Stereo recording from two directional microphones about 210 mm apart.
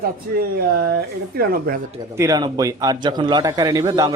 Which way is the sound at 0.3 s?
50° right (ahead or behind).